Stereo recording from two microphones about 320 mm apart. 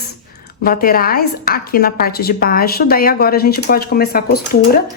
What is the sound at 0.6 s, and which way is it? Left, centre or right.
A woman's voice, left.